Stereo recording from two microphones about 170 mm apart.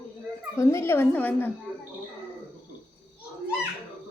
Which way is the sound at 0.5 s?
15° left (ahead or behind).